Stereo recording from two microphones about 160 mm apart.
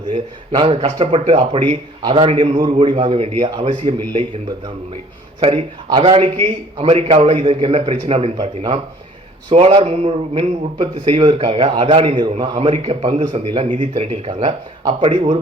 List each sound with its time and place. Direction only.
0.1 s a man's voice: 30° right (ahead or behind)
5.4 s a man's voice: 40° right (ahead or behind)